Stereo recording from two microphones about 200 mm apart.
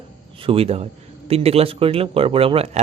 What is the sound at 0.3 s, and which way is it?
Speech, 25° right (ahead or behind).